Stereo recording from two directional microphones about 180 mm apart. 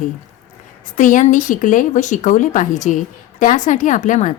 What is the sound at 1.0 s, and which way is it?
Speech, 45° left (ahead or behind).